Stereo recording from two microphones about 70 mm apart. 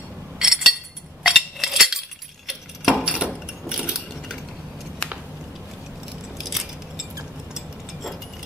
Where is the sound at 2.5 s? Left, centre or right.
Centre.